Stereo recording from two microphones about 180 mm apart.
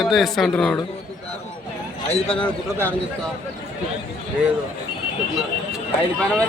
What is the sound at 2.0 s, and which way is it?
Speech, 35° left (ahead or behind).